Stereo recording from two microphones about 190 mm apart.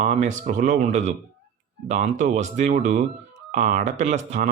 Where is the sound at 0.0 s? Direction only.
35° right (ahead or behind).